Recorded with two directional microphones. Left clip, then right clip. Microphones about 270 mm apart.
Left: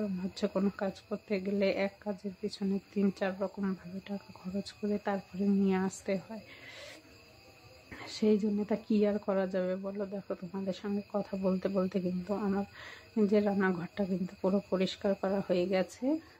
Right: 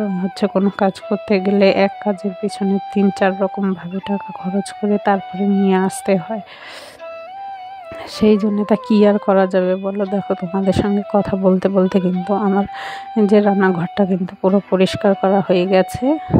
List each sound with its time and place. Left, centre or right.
0.4 s speech: right
8.2 s speech: right